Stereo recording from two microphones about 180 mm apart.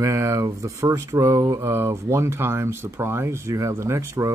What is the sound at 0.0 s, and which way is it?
Speech, 15° right (ahead or behind).